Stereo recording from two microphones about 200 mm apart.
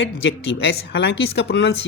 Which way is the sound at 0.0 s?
70° left (ahead or behind).